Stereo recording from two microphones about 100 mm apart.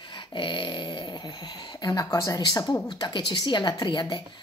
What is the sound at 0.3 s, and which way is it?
Speech, 50° left (ahead or behind).